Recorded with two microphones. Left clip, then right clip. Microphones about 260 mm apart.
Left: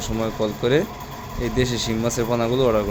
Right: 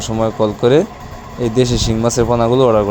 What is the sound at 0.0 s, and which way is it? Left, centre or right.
Speech, centre.